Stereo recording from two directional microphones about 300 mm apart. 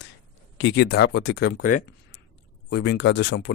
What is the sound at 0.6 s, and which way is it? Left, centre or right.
Speech, left.